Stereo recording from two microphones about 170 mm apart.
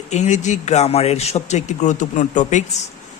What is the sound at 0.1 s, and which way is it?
Speech, 40° left (ahead or behind).